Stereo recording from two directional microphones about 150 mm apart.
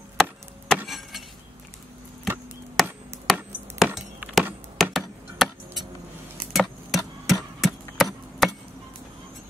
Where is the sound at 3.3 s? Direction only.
Centre (ahead or behind).